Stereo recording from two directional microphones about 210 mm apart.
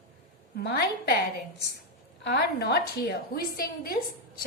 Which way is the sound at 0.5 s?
50° left (ahead or behind).